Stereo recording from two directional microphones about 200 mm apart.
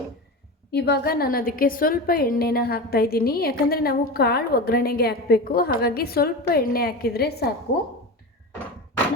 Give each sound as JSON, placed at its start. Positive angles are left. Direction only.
{"t": 0.7, "sound": "a woman's voice", "side_deg": 50}